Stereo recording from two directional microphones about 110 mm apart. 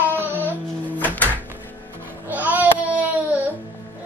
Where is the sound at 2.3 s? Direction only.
15° right (ahead or behind).